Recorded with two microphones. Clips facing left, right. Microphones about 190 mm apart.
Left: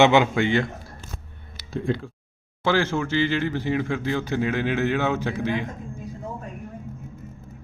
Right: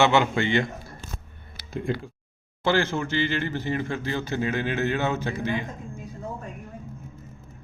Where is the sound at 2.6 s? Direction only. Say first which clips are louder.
Left 1 dB; 10° left (ahead or behind).